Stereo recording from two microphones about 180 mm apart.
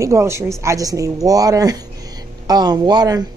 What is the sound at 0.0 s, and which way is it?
A woman's voice, 15° right (ahead or behind).